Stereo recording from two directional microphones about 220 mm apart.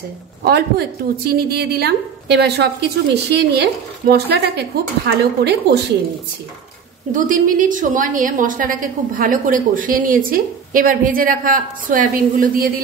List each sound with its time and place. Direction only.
0.4 s a woman's voice: 45° right (ahead or behind)
7.1 s a woman's voice: 35° right (ahead or behind)